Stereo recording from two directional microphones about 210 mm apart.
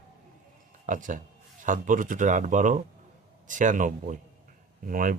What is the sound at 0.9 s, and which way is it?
Speech, 40° right (ahead or behind).